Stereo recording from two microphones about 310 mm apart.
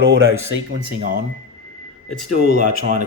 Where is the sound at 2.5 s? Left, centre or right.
Right.